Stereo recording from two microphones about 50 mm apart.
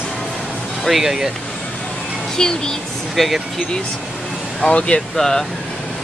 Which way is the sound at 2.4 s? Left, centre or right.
Centre.